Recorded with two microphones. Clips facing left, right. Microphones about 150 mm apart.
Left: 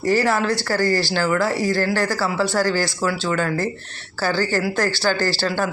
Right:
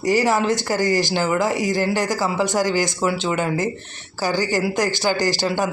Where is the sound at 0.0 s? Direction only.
15° right (ahead or behind).